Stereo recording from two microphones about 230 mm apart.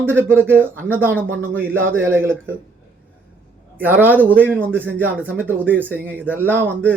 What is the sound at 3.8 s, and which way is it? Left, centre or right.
Speech, centre.